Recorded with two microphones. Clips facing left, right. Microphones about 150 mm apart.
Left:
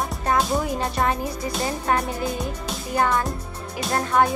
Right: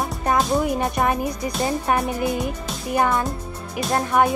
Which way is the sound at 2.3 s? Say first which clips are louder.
Right 3 dB; centre (ahead or behind).